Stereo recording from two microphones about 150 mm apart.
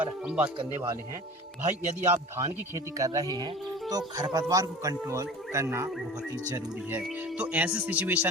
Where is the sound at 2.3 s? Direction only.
20° right (ahead or behind).